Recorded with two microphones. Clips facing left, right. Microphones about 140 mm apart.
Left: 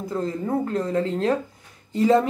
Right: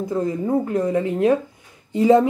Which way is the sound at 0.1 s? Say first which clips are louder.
Right 3 dB; 20° right (ahead or behind).